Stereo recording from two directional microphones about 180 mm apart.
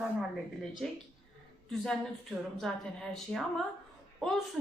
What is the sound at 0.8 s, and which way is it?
Speech, centre (ahead or behind).